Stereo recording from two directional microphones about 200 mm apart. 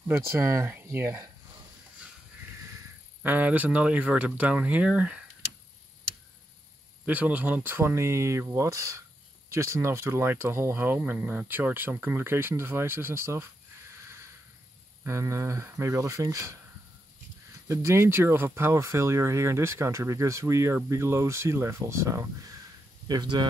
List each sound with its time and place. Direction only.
0.4 s speech: 15° right (ahead or behind)
3.2 s speech: 10° right (ahead or behind)
7.1 s speech: 5° right (ahead or behind)
15.0 s speech: 15° right (ahead or behind)
17.6 s speech: 15° right (ahead or behind)